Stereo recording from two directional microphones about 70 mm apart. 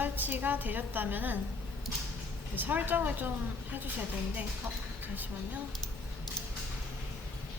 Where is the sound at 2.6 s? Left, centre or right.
Right.